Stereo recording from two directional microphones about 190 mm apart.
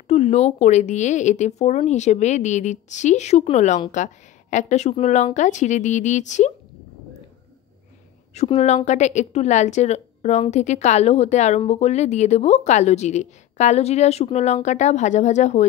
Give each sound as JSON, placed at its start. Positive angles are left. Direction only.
{"t": 0.1, "sound": "speech", "side_deg": 35}
{"t": 8.4, "sound": "speech", "side_deg": 35}